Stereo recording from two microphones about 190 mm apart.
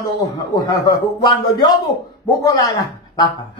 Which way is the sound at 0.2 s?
20° left (ahead or behind).